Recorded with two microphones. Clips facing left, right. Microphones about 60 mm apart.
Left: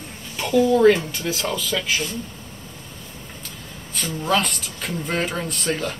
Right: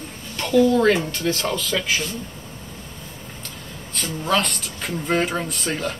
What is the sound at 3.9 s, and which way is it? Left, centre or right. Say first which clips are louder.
Speech: even; centre.